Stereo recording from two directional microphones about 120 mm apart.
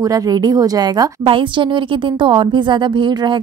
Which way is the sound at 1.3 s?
45° right (ahead or behind).